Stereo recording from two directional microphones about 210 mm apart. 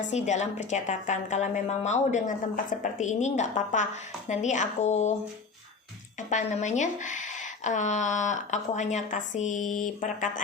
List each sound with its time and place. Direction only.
0.1 s speech: 35° left (ahead or behind)
6.1 s speech: 35° left (ahead or behind)